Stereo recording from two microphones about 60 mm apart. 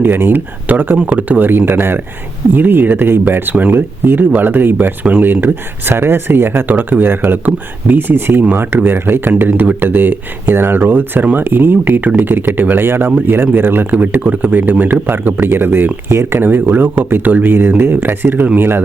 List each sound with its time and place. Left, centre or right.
0.0 s speech: right
16.4 s speech: right